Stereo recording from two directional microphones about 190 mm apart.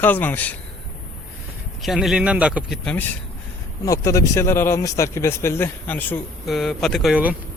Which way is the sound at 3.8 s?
15° left (ahead or behind).